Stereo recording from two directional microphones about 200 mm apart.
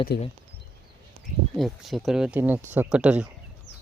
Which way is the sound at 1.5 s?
Centre (ahead or behind).